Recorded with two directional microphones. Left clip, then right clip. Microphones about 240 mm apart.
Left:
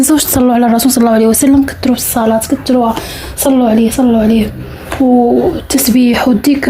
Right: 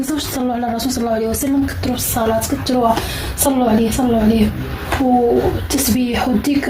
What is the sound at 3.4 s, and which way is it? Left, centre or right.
Speech, left.